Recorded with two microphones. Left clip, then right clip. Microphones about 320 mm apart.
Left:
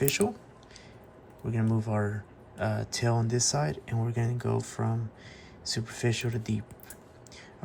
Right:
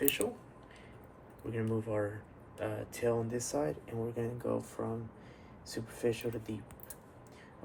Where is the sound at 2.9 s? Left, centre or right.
Left.